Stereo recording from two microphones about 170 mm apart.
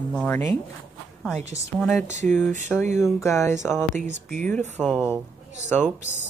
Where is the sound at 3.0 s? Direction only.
15° left (ahead or behind).